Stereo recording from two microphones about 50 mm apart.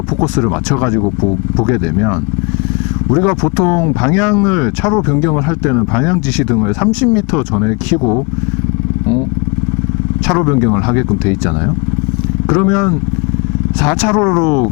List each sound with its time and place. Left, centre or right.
0.7 s speech: left
10.3 s speech: left